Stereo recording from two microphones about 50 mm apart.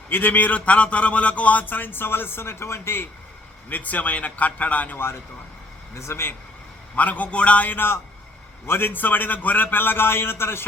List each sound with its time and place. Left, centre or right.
0.1 s speech: left
3.7 s speech: left
5.9 s speech: left
6.9 s speech: left
8.6 s a man's voice: left